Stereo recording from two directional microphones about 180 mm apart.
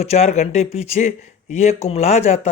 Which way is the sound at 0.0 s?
35° left (ahead or behind).